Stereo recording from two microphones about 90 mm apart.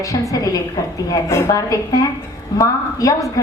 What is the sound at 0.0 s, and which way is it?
A woman's voice, 40° left (ahead or behind).